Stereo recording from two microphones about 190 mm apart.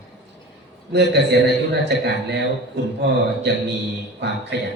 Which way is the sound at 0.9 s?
60° right (ahead or behind).